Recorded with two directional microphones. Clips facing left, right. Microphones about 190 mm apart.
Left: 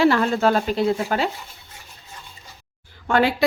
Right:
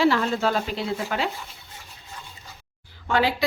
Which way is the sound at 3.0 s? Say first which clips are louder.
Left 4 dB; 50° left (ahead or behind).